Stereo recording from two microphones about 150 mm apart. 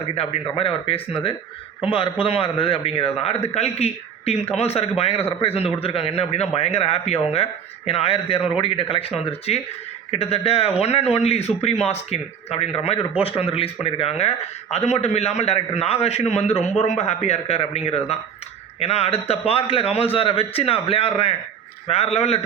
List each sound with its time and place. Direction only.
0.1 s a man's voice: 40° left (ahead or behind)